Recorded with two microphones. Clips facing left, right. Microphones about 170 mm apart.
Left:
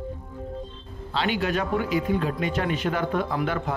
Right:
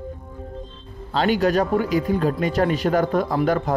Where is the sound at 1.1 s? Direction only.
40° right (ahead or behind).